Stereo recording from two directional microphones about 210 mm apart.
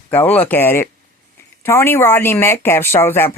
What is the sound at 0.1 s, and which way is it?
Speech, 10° left (ahead or behind).